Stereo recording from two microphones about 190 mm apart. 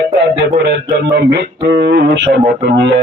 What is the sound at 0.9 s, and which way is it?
Speech, 60° right (ahead or behind).